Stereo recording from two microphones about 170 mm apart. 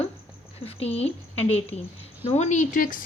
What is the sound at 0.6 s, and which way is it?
Speech, 35° left (ahead or behind).